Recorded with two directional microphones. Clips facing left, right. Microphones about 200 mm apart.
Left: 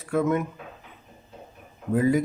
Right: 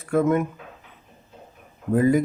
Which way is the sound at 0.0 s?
50° right (ahead or behind).